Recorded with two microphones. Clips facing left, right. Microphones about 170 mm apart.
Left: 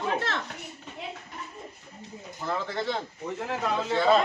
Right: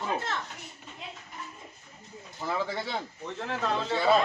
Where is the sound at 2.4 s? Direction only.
10° right (ahead or behind).